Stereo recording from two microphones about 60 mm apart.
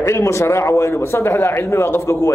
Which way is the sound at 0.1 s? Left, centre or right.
Left.